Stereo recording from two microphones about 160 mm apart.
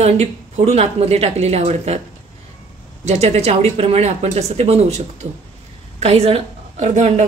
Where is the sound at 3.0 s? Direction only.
45° right (ahead or behind).